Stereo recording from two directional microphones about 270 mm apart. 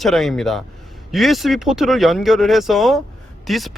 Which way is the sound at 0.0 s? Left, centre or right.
Centre.